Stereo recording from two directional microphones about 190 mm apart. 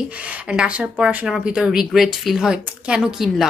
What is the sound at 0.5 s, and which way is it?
Speech, 5° right (ahead or behind).